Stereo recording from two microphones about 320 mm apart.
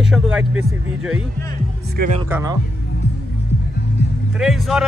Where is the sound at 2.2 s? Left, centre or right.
Centre.